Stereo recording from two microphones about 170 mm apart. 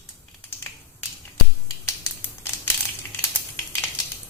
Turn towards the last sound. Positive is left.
turn(degrees=10)  # may be behind; listen again after turning